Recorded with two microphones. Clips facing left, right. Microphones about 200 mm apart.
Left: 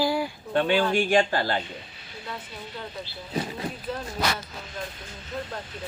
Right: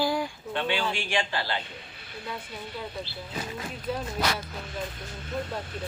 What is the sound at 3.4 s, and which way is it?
Speech, 30° left (ahead or behind).